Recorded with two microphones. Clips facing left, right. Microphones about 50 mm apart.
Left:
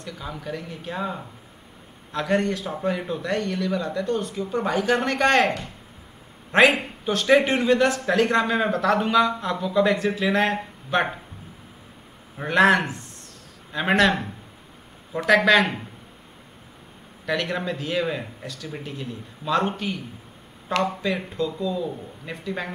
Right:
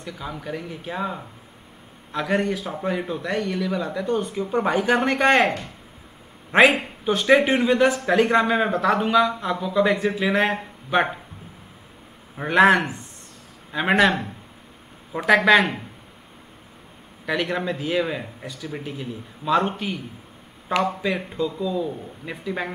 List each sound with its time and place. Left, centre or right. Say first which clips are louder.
0.0 s a man's voice: right 1 dB; centre
6.5 s a man's voice: right 1 dB; centre
12.4 s a man's voice: right 2 dB; centre
15.1 s a man's voice: right 1 dB; centre
17.3 s a man's voice: right 1 dB; centre